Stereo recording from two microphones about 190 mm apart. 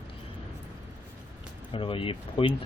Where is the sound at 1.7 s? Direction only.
25° left (ahead or behind).